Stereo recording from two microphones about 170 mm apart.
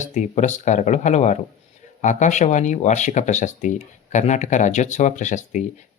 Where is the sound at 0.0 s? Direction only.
45° left (ahead or behind).